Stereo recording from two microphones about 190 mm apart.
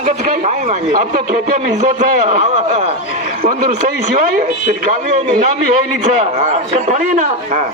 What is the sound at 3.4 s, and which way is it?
Speech, 45° right (ahead or behind).